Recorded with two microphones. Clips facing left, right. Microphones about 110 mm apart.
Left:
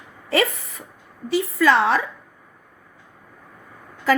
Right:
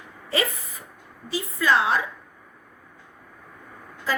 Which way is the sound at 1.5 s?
75° left (ahead or behind).